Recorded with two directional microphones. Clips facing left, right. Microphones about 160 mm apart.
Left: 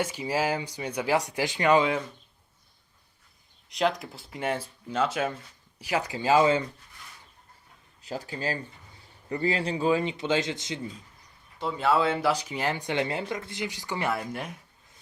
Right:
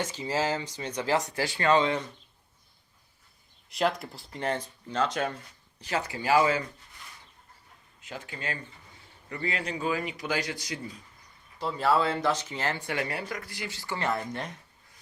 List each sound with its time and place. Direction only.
0.0 s speech: 10° left (ahead or behind)
3.7 s speech: centre (ahead or behind); by 6.7 s 25° left (ahead or behind)
8.0 s speech: 35° left (ahead or behind)
11.6 s speech: centre (ahead or behind)